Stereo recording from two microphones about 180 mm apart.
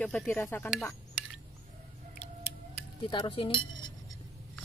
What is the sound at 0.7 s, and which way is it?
Speech, centre (ahead or behind).